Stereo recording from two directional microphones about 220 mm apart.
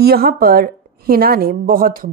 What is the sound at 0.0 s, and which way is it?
A woman's voice, 45° right (ahead or behind).